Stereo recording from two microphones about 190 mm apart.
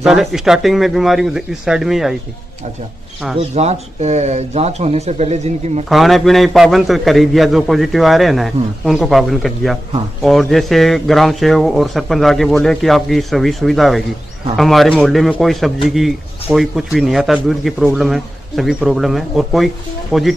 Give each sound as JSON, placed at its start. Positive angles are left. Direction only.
{"t": 0.0, "sound": "speech", "side_deg": 0}
{"t": 3.3, "sound": "speech", "side_deg": -35}
{"t": 5.9, "sound": "speech", "side_deg": 0}